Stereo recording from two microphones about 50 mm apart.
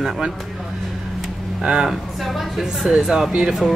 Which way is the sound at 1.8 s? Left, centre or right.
Centre.